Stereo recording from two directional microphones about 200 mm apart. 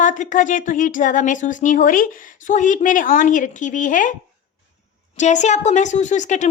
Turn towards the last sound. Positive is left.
turn(degrees=35)  # may be behind; listen again after turning